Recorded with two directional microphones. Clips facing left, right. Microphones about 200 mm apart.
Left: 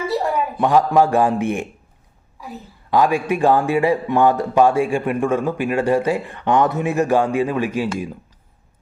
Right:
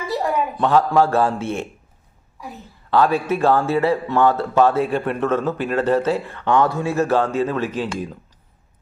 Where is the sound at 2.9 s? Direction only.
15° left (ahead or behind).